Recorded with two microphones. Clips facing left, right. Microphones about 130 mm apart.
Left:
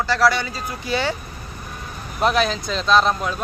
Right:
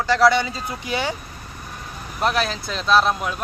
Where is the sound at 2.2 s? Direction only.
Centre (ahead or behind).